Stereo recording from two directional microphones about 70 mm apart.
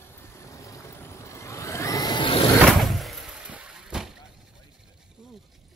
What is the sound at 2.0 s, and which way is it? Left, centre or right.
Vehicle, left.